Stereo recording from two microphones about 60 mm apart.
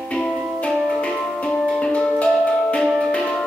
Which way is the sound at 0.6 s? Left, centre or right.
Centre.